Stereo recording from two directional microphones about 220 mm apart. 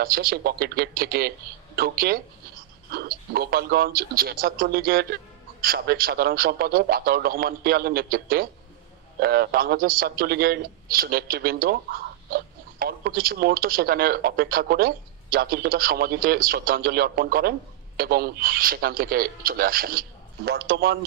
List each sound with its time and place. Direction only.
0.0 s a man's voice: 45° right (ahead or behind)